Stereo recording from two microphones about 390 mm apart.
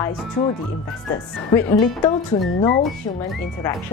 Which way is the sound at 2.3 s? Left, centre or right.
Left.